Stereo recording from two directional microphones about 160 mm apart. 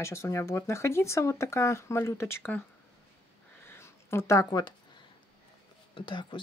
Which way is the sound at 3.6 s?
15° left (ahead or behind).